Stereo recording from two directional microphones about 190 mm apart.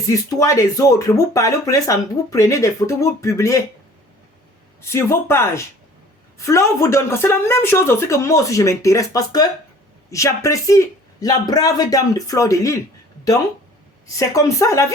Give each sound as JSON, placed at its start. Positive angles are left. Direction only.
{"t": 0.1, "sound": "speech", "side_deg": 15}
{"t": 4.8, "sound": "speech", "side_deg": 15}
{"t": 14.1, "sound": "speech", "side_deg": 15}